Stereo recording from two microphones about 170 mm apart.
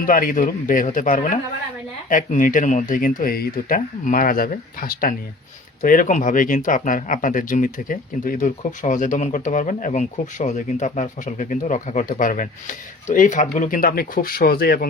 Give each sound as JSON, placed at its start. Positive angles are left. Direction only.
{"t": 0.0, "sound": "speech", "side_deg": 55}